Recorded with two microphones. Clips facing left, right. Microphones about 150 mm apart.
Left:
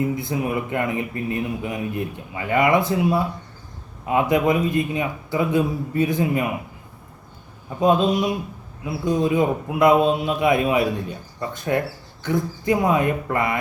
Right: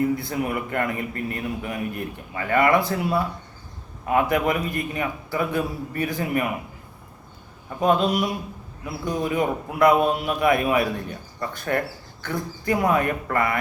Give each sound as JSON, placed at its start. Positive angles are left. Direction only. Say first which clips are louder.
{"t": 0.0, "sound": "speech", "louder": "even", "side_deg": 20}
{"t": 7.8, "sound": "speech", "louder": "left 2 dB", "side_deg": 20}